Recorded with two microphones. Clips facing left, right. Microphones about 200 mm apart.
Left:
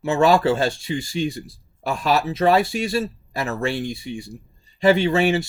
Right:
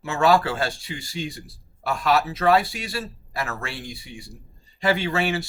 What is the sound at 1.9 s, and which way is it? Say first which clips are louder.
Speech: left 1 dB; 20° left (ahead or behind).